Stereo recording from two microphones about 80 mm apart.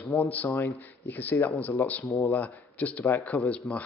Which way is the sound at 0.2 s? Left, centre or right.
Left.